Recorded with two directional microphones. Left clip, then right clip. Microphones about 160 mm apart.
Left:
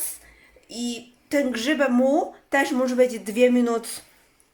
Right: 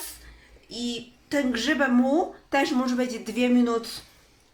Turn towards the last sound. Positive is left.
turn(degrees=45)  # may be behind; listen again after turning